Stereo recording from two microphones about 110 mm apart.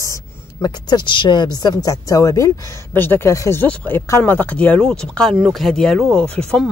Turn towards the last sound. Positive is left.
turn(degrees=10)  # may be behind; listen again after turning